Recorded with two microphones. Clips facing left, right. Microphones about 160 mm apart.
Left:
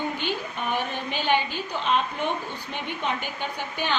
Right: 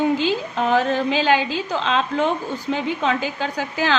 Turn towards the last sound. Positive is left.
turn(degrees=-90)